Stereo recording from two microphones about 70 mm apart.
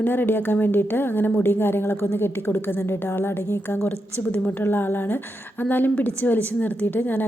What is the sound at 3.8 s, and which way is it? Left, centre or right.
A woman's voice, left.